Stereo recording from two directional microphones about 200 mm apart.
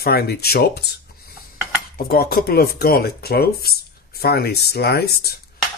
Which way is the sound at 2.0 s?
50° left (ahead or behind).